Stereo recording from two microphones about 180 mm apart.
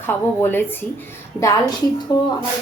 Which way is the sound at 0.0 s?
10° left (ahead or behind).